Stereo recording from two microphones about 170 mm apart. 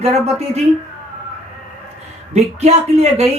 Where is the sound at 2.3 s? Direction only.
40° right (ahead or behind).